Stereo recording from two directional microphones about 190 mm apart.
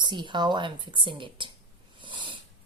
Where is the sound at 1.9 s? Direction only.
25° right (ahead or behind).